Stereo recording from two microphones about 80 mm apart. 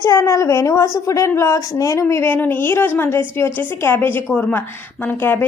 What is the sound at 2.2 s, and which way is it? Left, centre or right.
A woman's voice, left.